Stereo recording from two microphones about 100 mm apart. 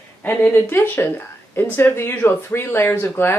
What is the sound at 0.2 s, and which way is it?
Speech, 20° left (ahead or behind).